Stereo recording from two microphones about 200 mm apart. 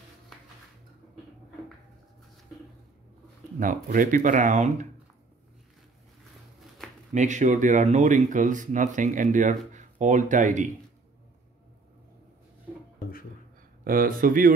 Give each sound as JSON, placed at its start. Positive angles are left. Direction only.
{"t": 3.5, "sound": "speech", "side_deg": -45}
{"t": 7.2, "sound": "speech", "side_deg": -35}
{"t": 13.8, "sound": "speech", "side_deg": -45}